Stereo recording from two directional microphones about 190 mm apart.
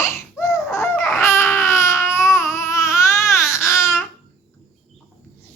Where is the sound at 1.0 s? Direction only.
15° left (ahead or behind).